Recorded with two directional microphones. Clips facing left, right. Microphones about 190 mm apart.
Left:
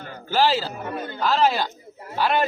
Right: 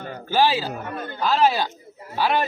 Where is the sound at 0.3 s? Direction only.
15° right (ahead or behind).